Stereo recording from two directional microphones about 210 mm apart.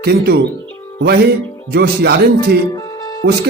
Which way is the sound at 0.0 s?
50° right (ahead or behind).